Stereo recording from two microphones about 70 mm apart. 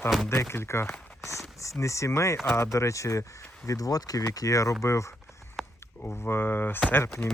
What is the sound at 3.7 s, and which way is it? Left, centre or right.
Speech, left.